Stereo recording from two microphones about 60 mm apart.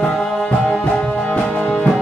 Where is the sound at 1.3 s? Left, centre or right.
Left.